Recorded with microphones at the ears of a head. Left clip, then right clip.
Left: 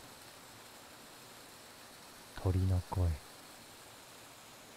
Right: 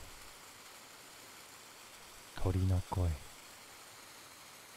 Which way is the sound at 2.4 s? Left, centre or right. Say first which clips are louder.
Even; centre.